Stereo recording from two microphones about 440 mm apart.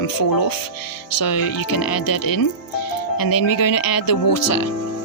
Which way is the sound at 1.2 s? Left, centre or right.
Left.